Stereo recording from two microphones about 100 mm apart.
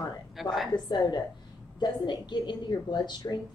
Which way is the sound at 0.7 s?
45° left (ahead or behind).